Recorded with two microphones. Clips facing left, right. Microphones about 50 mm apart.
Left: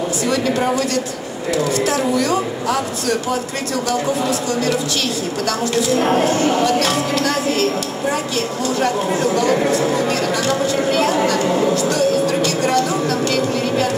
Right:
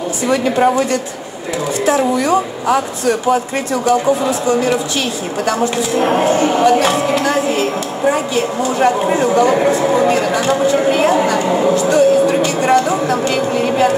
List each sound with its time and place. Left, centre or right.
0.3 s speech: right
1.9 s speech: right